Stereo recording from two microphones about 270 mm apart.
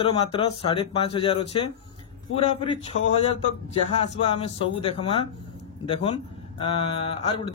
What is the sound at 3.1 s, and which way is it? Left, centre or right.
Speech, left.